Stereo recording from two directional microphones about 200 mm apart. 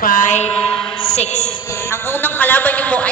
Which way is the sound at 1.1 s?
35° left (ahead or behind).